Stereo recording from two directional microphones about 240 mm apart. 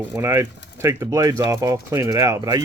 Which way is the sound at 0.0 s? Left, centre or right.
Centre.